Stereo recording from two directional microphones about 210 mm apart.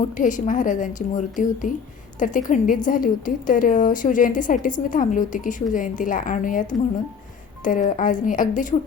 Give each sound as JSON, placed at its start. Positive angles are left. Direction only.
{"t": 0.2, "sound": "a woman's voice", "side_deg": 35}